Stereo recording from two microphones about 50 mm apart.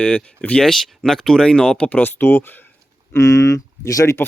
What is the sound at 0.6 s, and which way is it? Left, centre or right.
Speech, centre.